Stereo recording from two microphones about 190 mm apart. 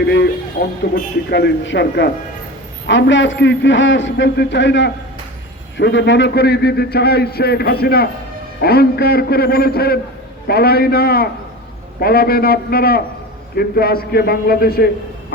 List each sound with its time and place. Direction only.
0.0 s a man's voice: 65° left (ahead or behind)
2.8 s a man's voice: 75° left (ahead or behind); by 14.8 s 55° left (ahead or behind)